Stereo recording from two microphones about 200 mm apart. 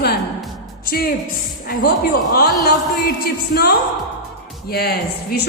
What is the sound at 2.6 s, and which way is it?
A woman's voice, 50° left (ahead or behind).